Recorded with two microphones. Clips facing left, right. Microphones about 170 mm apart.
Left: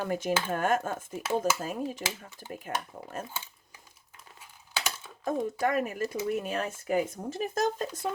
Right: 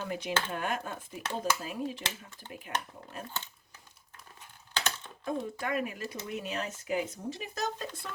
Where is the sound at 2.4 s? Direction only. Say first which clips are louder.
Left 5 dB; 10° left (ahead or behind).